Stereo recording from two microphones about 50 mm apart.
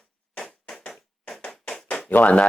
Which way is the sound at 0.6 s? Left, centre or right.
Left.